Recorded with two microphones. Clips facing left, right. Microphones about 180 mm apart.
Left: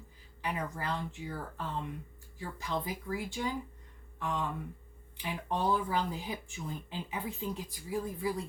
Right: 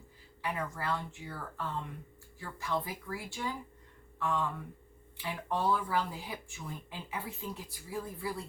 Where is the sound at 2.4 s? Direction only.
15° left (ahead or behind).